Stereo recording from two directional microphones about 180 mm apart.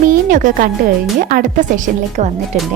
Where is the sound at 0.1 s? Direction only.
45° right (ahead or behind).